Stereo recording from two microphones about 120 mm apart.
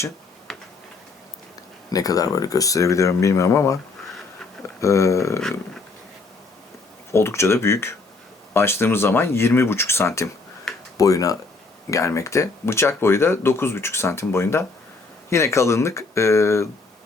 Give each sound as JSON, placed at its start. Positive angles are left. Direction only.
{"t": 0.5, "sound": "tick-tock", "side_deg": 0}
{"t": 1.9, "sound": "speech", "side_deg": 30}
{"t": 4.8, "sound": "speech", "side_deg": 25}
{"t": 7.1, "sound": "speech", "side_deg": 20}